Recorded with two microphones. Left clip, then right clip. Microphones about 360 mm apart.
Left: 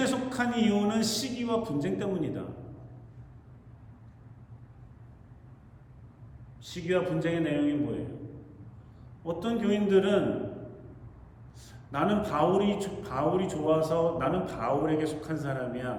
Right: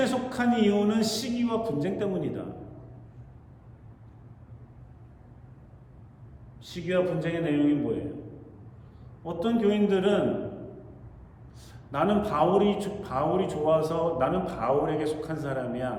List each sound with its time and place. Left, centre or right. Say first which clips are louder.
0.0 s a man's voice: right 2 dB; centre
6.6 s a man's voice: right 2 dB; centre
9.2 s a man's voice: right 5 dB; centre
11.9 s a man's voice: right 3 dB; centre